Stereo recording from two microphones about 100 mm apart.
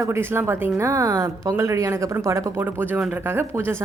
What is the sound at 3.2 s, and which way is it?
Speech, 20° right (ahead or behind).